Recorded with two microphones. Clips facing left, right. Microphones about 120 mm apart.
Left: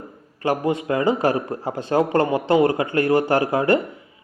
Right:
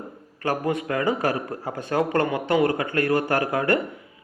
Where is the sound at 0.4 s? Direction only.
20° left (ahead or behind).